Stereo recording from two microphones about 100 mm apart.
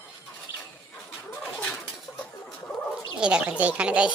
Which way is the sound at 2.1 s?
15° left (ahead or behind).